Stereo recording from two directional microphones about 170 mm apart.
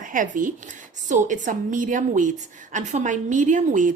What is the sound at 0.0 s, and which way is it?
A woman's voice, 50° right (ahead or behind).